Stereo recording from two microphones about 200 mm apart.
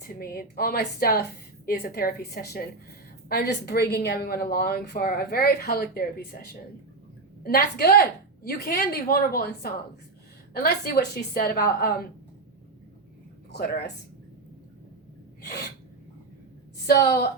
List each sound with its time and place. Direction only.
0.0 s a woman's voice: 50° left (ahead or behind)
13.5 s speech: 55° left (ahead or behind)
16.8 s a woman's voice: 55° left (ahead or behind)